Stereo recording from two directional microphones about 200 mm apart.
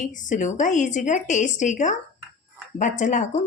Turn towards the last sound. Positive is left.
turn(degrees=40)  # may be behind; listen again after turning